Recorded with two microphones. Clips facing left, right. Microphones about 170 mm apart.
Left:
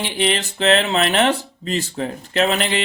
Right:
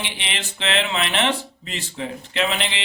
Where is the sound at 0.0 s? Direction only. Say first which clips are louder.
Left 10 dB; 40° left (ahead or behind).